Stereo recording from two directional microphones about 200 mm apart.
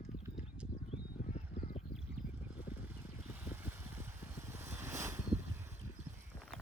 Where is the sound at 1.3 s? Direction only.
35° left (ahead or behind).